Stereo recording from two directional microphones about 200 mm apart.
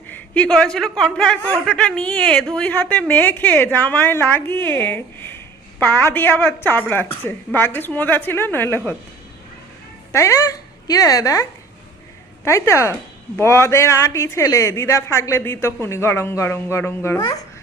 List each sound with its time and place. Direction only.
0.1 s a man's voice: 5° left (ahead or behind)
10.1 s a woman's voice: 15° left (ahead or behind)
12.5 s a man's voice: 15° left (ahead or behind)